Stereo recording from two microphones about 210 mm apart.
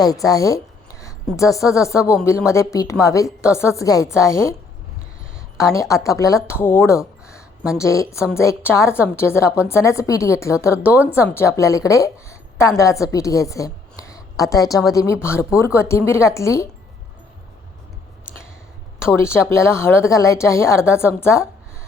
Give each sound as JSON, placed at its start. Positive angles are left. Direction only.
{"t": 0.0, "sound": "a woman's voice", "side_deg": 15}
{"t": 5.9, "sound": "a woman's voice", "side_deg": 15}
{"t": 19.1, "sound": "a woman's voice", "side_deg": 10}